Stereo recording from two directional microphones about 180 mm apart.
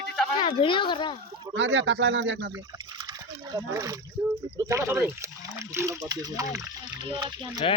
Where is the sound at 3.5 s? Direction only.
20° right (ahead or behind).